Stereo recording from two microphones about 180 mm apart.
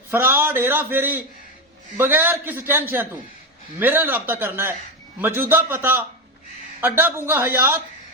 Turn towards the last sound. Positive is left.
turn(degrees=-15)  # may be behind; listen again after turning